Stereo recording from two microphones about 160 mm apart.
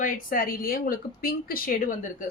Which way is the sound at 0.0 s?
60° left (ahead or behind).